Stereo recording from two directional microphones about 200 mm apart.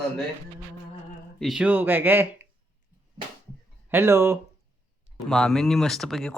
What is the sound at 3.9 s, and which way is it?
Speech, 10° right (ahead or behind).